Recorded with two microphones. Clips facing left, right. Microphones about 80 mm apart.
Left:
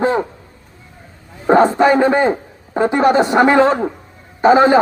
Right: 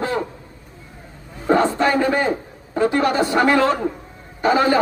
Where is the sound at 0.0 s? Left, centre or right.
Left.